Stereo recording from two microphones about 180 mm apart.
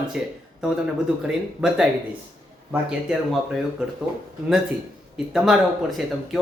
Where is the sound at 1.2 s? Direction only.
5° right (ahead or behind).